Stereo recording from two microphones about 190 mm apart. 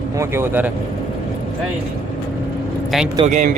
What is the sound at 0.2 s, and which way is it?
Speech, 10° right (ahead or behind).